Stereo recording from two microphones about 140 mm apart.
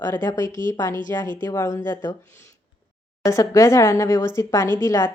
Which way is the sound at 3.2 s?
20° left (ahead or behind).